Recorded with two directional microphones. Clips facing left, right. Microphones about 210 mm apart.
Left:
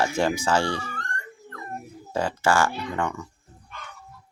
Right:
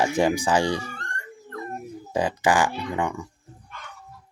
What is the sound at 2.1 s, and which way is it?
Speech, 15° right (ahead or behind).